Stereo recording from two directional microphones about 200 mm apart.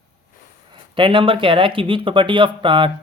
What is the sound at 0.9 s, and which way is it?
Speech, 25° right (ahead or behind).